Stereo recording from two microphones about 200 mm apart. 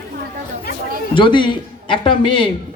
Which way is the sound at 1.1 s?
25° left (ahead or behind).